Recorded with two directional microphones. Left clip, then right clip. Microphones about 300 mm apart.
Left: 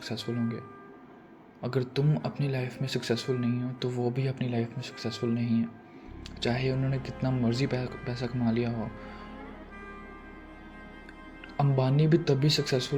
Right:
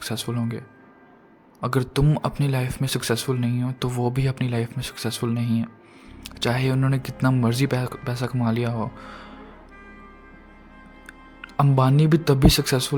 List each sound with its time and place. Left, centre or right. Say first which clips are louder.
0.0 s speech: right 5 dB; right
1.6 s speech: right 7 dB; right
11.4 s speech: right 8 dB; right